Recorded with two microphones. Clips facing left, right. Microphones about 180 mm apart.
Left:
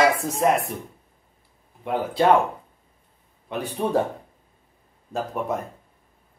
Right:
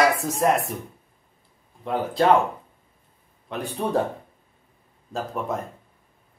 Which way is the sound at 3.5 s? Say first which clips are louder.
Left 1 dB; 5° left (ahead or behind).